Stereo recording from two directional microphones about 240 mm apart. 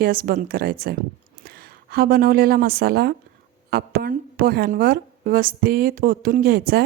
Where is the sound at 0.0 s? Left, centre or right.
Right.